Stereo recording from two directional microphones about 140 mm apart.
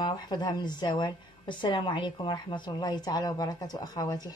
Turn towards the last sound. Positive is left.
turn(degrees=30)  # may be behind; listen again after turning